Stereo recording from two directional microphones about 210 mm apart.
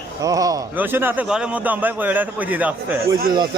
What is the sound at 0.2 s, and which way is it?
A man's voice, 15° right (ahead or behind).